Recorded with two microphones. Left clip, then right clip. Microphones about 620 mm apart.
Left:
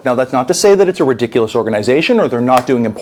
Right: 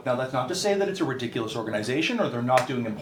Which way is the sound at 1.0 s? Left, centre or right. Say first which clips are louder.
Left 16 dB; left.